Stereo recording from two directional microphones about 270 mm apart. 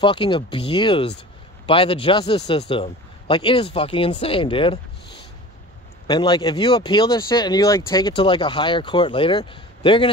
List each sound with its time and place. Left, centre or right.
0.0 s speech: centre
6.0 s speech: centre